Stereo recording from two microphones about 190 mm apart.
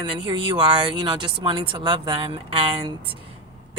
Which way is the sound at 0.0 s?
25° right (ahead or behind).